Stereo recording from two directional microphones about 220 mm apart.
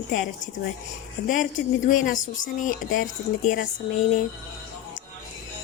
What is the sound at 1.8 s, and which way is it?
Speech, 35° left (ahead or behind).